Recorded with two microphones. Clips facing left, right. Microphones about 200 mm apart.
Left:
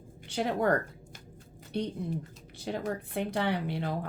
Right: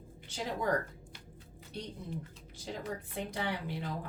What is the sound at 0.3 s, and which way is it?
Speech, 65° left (ahead or behind).